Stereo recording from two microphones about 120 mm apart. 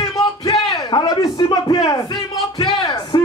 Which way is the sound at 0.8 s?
35° left (ahead or behind).